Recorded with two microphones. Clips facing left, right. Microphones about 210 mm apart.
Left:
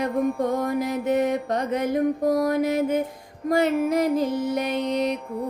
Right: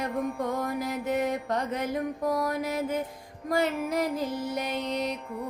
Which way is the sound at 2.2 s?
45° left (ahead or behind).